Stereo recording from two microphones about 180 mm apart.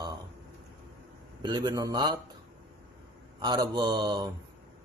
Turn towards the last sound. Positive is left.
turn(degrees=-25)  # may be behind; listen again after turning